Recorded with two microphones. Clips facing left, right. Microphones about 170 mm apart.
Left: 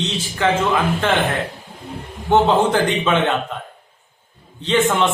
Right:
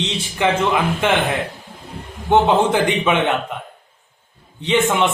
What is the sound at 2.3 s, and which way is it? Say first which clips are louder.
A man's voice: even; 15° right (ahead or behind).